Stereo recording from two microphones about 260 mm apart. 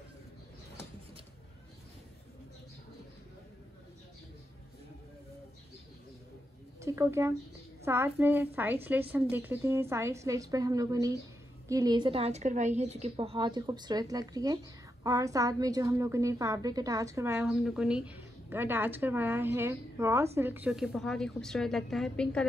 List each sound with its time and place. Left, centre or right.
6.8 s a woman's voice: centre